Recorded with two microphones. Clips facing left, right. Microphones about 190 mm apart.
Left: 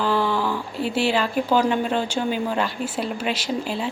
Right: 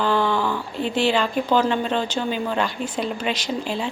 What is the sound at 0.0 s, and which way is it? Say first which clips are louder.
A woman's voice: right 1 dB; 5° left (ahead or behind).